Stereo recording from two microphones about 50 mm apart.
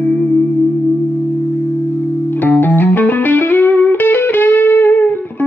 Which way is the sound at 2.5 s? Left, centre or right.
Left.